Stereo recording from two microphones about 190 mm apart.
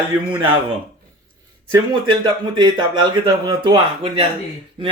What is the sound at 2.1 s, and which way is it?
Speech, 25° right (ahead or behind).